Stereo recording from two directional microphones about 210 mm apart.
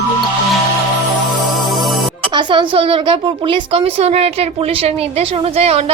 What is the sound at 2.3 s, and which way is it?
A woman's voice, 20° right (ahead or behind).